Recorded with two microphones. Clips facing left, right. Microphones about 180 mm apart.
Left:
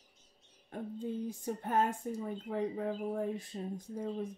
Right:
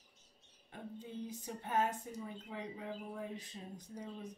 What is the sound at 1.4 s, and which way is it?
Speech, 50° left (ahead or behind).